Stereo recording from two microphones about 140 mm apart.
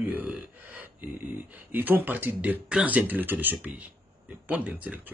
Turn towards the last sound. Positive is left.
turn(degrees=-10)  # may be behind; listen again after turning